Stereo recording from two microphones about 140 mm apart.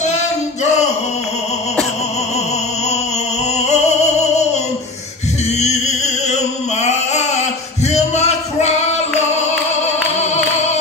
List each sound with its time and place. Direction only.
3.5 s music: 50° left (ahead or behind)
5.6 s a sound: 50° left (ahead or behind)
7.9 s music: 50° left (ahead or behind)